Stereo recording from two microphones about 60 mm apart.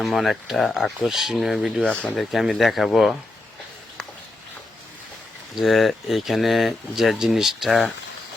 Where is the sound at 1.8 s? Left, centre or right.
Centre.